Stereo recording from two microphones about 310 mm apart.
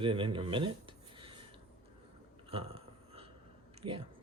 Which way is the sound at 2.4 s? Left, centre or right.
Centre.